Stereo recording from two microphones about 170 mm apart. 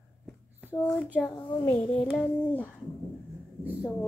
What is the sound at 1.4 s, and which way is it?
Speech, 25° left (ahead or behind).